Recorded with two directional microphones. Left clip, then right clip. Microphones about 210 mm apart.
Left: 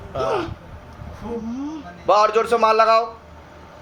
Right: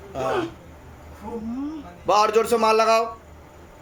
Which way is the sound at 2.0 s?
35° right (ahead or behind).